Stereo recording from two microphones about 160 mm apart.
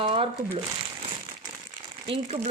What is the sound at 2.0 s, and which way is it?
Speech, 35° right (ahead or behind).